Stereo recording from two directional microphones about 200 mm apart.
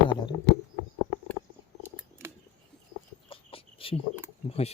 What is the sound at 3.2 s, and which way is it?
Chicken, 25° left (ahead or behind).